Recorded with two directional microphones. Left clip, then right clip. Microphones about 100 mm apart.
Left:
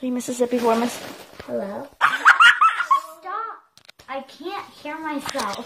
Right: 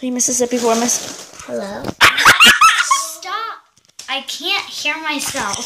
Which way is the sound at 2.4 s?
5° right (ahead or behind).